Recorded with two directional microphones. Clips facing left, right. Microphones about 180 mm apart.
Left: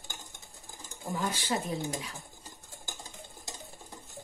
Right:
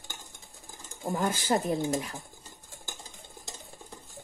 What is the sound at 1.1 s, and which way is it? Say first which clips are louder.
Speech: right 5 dB; 50° right (ahead or behind).